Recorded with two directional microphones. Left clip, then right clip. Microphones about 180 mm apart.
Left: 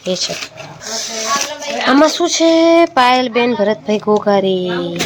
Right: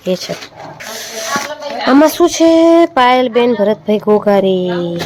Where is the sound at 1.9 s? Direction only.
25° right (ahead or behind).